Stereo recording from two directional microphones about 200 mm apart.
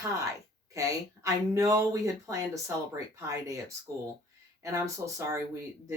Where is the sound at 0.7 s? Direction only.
15° right (ahead or behind).